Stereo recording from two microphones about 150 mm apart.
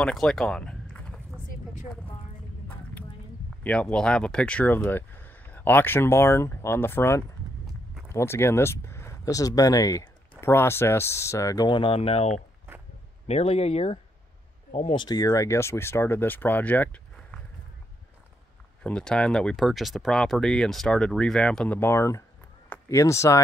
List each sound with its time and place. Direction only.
0.0 s a sound: 5° left (ahead or behind)
3.6 s speech: 5° left (ahead or behind); by 15.0 s 40° left (ahead or behind)
15.0 s speech: 25° left (ahead or behind)
18.8 s speech: 5° left (ahead or behind)